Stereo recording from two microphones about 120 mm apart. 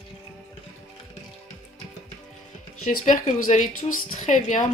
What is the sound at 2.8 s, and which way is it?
Speech, 90° left.